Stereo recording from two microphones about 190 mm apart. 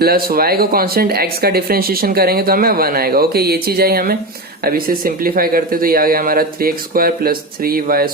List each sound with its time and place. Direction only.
0.0 s speech: 50° right (ahead or behind)